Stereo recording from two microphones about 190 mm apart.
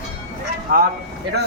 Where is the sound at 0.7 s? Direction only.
45° right (ahead or behind).